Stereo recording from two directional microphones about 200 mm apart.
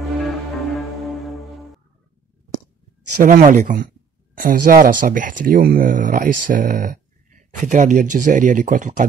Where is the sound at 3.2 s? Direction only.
40° right (ahead or behind).